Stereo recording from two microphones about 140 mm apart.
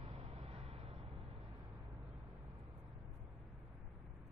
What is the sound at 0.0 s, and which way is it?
Vehicle, 45° right (ahead or behind).